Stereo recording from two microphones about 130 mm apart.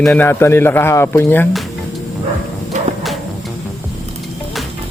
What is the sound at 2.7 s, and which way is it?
Music, 65° right (ahead or behind).